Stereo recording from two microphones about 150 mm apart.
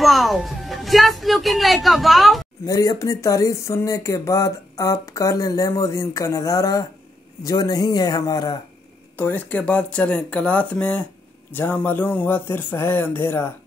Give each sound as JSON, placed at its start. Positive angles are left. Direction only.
{"t": 0.0, "sound": "speech", "side_deg": 0}
{"t": 2.6, "sound": "speech", "side_deg": 25}
{"t": 9.1, "sound": "speech", "side_deg": 10}